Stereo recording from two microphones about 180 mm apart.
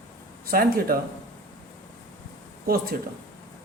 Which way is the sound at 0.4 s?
55° right (ahead or behind).